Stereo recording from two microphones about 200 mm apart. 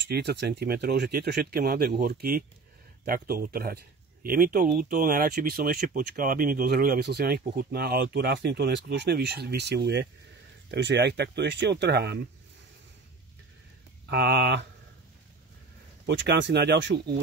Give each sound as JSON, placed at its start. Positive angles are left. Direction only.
{"t": 0.1, "sound": "speech", "side_deg": -55}
{"t": 14.0, "sound": "speech", "side_deg": -55}
{"t": 16.1, "sound": "speech", "side_deg": -60}